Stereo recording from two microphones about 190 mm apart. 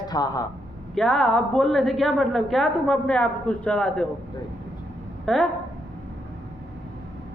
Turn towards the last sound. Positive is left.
turn(degrees=0)  # may be behind; listen again after turning